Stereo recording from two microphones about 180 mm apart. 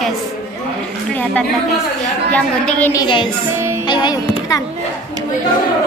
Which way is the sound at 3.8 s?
25° left (ahead or behind).